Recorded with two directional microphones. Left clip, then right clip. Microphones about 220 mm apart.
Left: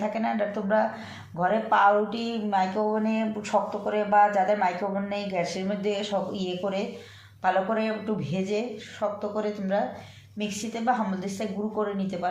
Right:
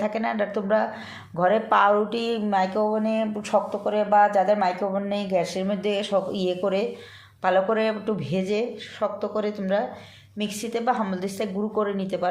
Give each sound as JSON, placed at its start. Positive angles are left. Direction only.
{"t": 0.0, "sound": "speech", "side_deg": -45}